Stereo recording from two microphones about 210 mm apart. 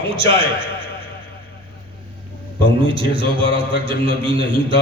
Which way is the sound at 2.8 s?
25° right (ahead or behind).